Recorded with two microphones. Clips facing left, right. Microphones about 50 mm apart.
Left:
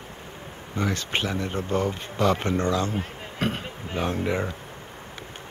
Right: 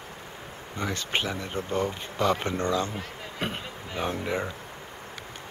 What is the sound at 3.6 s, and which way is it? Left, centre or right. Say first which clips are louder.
Speech: left 3 dB; left.